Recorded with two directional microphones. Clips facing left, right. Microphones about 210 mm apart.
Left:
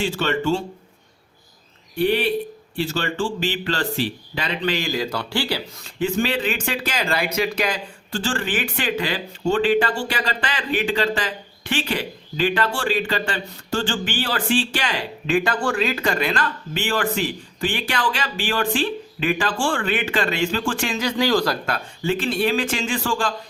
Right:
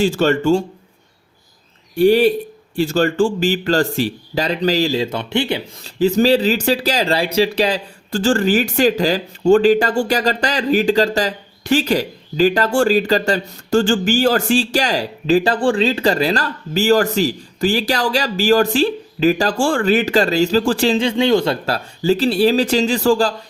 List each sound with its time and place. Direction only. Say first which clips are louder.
0.0 s speech: right 7 dB; 40° right (ahead or behind)
2.0 s speech: right 8 dB; 40° right (ahead or behind); by 5.6 s 20° right (ahead or behind)
5.8 s speech: right 9 dB; 40° right (ahead or behind)